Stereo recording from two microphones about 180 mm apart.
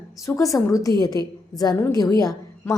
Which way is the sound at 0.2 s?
15° left (ahead or behind).